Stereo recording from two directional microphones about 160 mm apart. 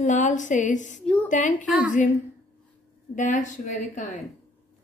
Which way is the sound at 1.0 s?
10° left (ahead or behind).